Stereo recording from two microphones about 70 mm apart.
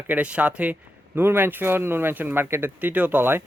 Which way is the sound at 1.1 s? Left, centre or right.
Right.